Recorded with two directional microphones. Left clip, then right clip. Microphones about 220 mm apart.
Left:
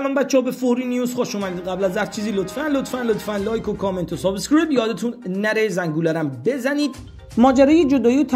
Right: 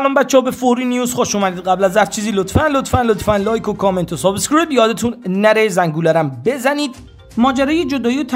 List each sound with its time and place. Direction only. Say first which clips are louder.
0.0 s a man's voice: right 6 dB; 15° right (ahead or behind)
7.3 s speech: left 1 dB; centre (ahead or behind)